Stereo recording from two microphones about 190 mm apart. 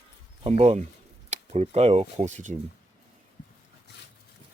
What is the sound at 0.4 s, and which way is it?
Speech, 35° right (ahead or behind).